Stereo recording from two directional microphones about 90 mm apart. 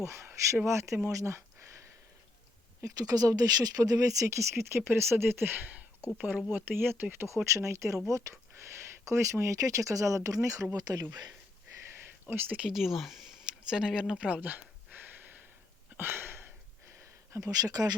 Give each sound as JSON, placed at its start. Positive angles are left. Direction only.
{"t": 0.0, "sound": "speech", "side_deg": -30}
{"t": 1.0, "sound": "a sound", "side_deg": -35}
{"t": 2.8, "sound": "speech", "side_deg": -40}
{"t": 10.8, "sound": "speech", "side_deg": -50}
{"t": 12.6, "sound": "speech", "side_deg": -5}
{"t": 13.7, "sound": "a sound", "side_deg": -10}
{"t": 17.3, "sound": "speech", "side_deg": -40}